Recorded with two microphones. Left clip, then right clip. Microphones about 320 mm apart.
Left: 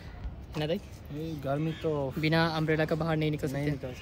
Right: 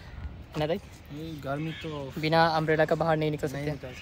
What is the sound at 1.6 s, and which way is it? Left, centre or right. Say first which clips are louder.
Speech: left 4 dB; left.